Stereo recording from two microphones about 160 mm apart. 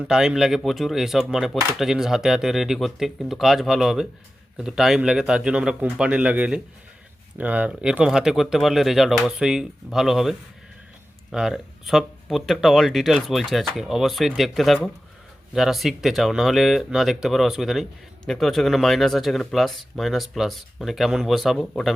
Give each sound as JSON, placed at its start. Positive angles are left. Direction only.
{"t": 0.0, "sound": "speech", "side_deg": -5}